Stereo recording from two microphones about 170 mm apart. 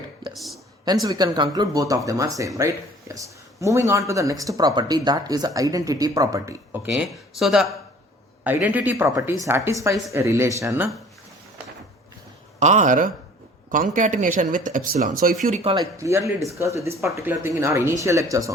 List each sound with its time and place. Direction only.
0.3 s speech: centre (ahead or behind)
1.0 s speech: 25° right (ahead or behind)
6.9 s speech: centre (ahead or behind)
12.5 s speech: 45° right (ahead or behind)
15.6 s speech: 25° right (ahead or behind)